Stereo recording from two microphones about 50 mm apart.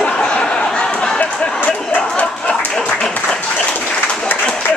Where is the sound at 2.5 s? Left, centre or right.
Left.